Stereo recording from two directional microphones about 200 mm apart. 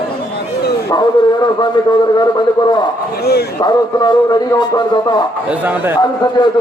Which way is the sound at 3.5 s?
20° left (ahead or behind).